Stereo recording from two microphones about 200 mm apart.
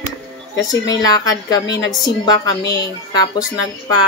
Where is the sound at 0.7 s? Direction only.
20° left (ahead or behind).